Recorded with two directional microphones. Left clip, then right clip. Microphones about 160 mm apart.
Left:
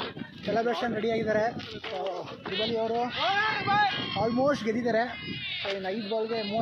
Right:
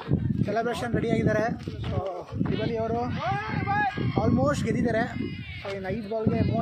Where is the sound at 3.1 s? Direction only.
50° right (ahead or behind).